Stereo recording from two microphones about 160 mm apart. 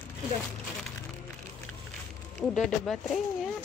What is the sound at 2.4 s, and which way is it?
Speech, 5° left (ahead or behind).